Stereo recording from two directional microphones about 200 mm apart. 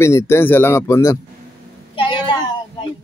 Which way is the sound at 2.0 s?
25° left (ahead or behind).